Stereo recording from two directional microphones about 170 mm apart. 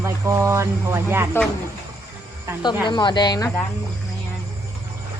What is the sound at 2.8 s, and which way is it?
Speech, 25° left (ahead or behind).